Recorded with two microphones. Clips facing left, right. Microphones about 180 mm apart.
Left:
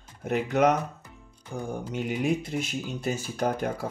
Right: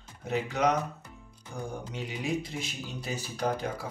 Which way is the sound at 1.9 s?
55° left (ahead or behind).